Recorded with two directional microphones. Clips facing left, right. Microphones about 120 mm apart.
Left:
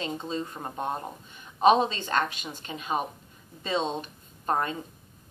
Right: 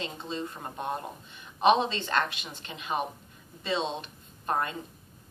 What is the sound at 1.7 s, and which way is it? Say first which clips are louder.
A woman's voice: left 2 dB; 45° left (ahead or behind).